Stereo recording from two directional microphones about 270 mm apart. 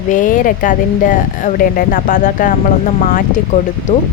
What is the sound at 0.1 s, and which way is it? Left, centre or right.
Speech, left.